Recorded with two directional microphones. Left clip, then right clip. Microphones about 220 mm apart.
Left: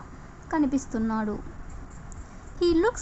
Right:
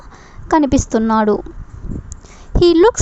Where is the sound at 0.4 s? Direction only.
45° right (ahead or behind).